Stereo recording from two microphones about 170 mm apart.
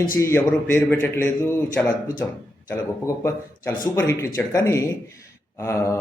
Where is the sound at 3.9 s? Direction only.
15° left (ahead or behind).